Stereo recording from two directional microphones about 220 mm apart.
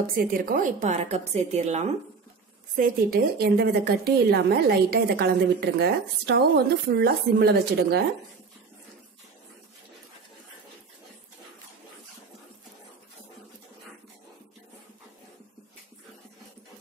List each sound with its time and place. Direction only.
0.1 s a woman's voice: 40° right (ahead or behind)
2.7 s a woman's voice: 40° right (ahead or behind)